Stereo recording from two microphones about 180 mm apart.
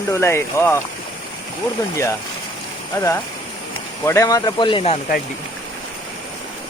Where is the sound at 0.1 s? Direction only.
15° left (ahead or behind).